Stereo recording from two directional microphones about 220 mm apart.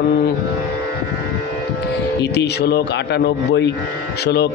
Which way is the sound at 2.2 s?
50° left (ahead or behind).